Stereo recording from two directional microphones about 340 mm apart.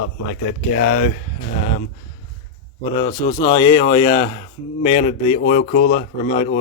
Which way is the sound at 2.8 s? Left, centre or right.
Centre.